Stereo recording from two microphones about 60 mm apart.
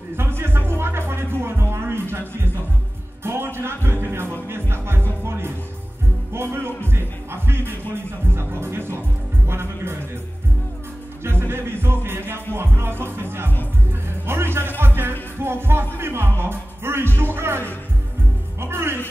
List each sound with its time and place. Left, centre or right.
0.1 s music: right
3.5 s music: right
11.2 s music: right